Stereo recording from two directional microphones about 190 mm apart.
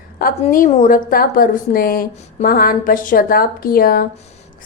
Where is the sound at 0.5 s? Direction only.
45° left (ahead or behind).